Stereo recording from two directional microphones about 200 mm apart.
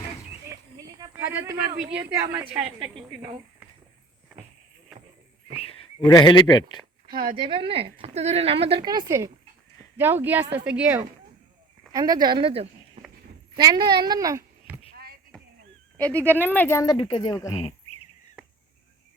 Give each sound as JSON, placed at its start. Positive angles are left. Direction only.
{"t": 0.5, "sound": "a sound", "side_deg": -15}
{"t": 2.1, "sound": "a woman's voice", "side_deg": -10}
{"t": 5.5, "sound": "a sound", "side_deg": 30}
{"t": 6.1, "sound": "speech", "side_deg": 20}
{"t": 7.3, "sound": "a woman's voice", "side_deg": -25}
{"t": 16.0, "sound": "speech", "side_deg": 5}